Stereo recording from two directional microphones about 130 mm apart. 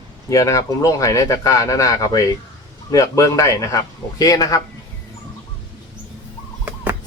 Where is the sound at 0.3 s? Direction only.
25° left (ahead or behind).